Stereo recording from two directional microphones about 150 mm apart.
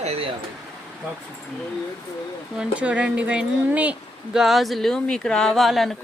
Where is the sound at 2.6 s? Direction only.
10° right (ahead or behind).